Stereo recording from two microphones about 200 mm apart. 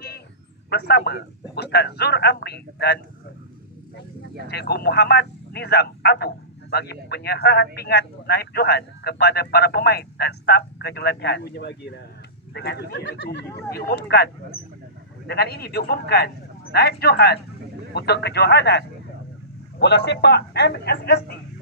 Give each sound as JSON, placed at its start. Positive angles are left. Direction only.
{"t": 0.7, "sound": "speech", "side_deg": 55}
{"t": 4.5, "sound": "a man's voice", "side_deg": 55}